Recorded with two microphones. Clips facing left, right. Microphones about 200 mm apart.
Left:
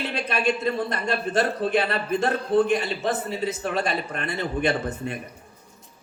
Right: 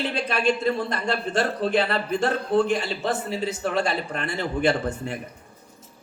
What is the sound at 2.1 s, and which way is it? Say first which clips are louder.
A man's voice: left 1 dB; 20° left (ahead or behind).